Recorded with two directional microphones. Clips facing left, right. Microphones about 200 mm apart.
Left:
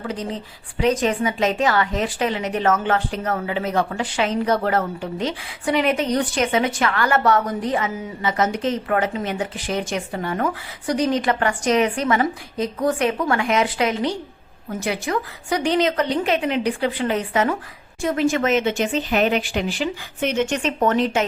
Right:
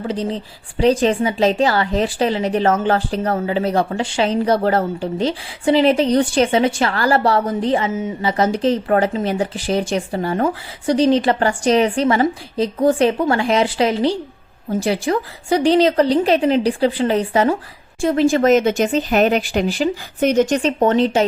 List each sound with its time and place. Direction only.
0.0 s a woman's voice: 30° right (ahead or behind)